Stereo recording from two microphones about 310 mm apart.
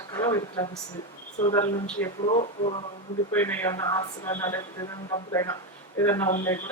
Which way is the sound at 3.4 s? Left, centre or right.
Centre.